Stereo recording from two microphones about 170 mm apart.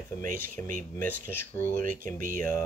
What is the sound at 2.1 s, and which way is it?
Speech, 50° right (ahead or behind).